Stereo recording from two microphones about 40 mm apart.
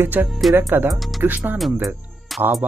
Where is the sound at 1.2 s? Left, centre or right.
Right.